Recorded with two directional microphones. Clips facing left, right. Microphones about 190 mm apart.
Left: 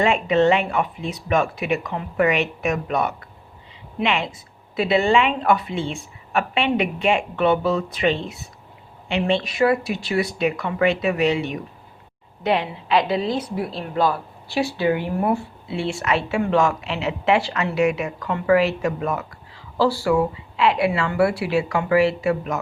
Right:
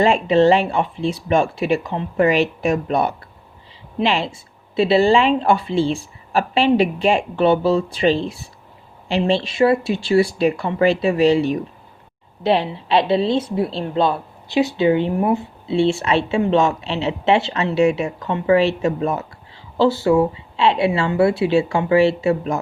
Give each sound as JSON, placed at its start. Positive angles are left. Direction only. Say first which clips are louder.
{"t": 0.0, "sound": "a woman's voice", "louder": "right 3 dB", "side_deg": -30}